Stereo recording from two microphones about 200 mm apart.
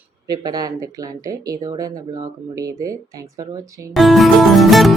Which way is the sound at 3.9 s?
Centre (ahead or behind).